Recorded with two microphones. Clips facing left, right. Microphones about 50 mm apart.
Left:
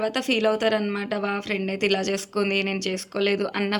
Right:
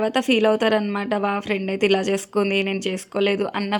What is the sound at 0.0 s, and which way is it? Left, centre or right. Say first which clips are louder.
Speech: right 4 dB; right.